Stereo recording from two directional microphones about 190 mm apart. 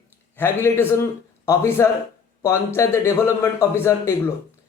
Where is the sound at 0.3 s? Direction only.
10° left (ahead or behind).